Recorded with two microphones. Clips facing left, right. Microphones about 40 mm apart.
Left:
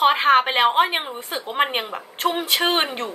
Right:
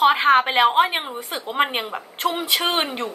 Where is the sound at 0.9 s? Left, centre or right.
Centre.